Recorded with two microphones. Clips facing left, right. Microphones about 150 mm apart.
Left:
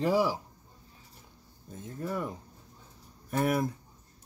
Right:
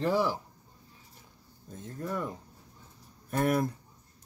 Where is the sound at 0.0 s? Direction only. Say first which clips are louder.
Left 1 dB; 10° left (ahead or behind).